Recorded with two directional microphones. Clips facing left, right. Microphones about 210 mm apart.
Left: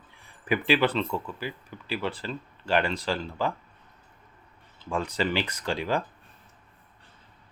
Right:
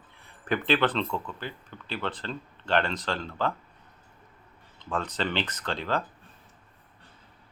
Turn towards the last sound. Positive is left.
turn(degrees=10)  # may be behind; listen again after turning